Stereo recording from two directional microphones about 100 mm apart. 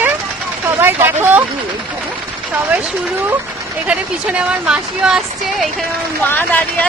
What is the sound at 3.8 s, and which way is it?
Speech, 10° right (ahead or behind).